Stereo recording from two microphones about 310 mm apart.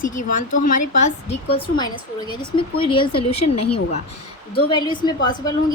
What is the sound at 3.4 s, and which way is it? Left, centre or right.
Speech, left.